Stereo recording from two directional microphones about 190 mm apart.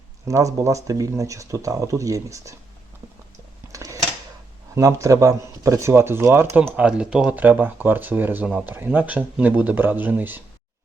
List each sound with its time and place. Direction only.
0.3 s speech: 15° right (ahead or behind)
3.7 s a sound: 15° right (ahead or behind)
4.7 s speech: 15° right (ahead or behind)